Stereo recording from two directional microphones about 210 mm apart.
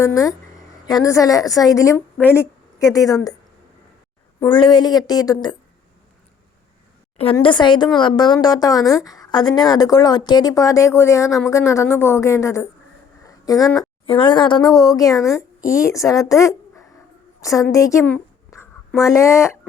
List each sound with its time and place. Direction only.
0.0 s a woman's voice: 15° left (ahead or behind)
4.4 s a woman's voice: 20° left (ahead or behind)
7.3 s a woman's voice: 20° left (ahead or behind)
13.2 s a sound: 15° left (ahead or behind)
14.1 s a woman's voice: 25° left (ahead or behind)
17.4 s a sound: 15° left (ahead or behind)
19.0 s a woman's voice: 15° left (ahead or behind)